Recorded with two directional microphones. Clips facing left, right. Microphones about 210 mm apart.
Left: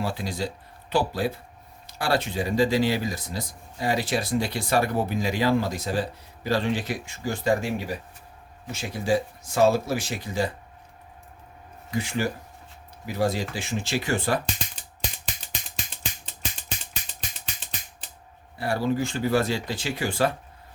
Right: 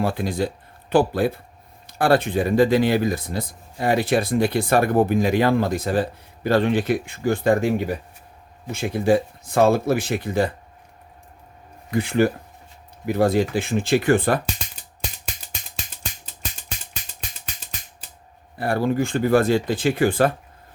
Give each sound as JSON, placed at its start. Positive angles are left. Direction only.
{"t": 0.0, "sound": "speech", "side_deg": -55}
{"t": 11.9, "sound": "speech", "side_deg": -55}
{"t": 18.5, "sound": "speech", "side_deg": -55}